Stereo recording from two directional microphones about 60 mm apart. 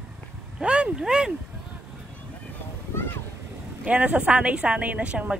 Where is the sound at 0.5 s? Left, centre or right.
Centre.